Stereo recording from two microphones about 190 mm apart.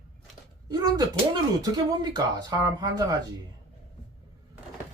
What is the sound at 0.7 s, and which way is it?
Speech, 20° right (ahead or behind).